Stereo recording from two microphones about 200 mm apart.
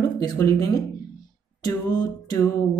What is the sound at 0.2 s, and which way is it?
Speech, 20° left (ahead or behind).